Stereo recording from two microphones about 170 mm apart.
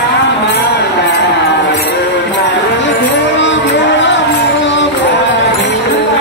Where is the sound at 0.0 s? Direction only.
90° left.